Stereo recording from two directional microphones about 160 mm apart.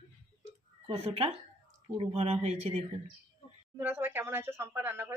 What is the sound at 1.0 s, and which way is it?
A woman's voice, 40° right (ahead or behind).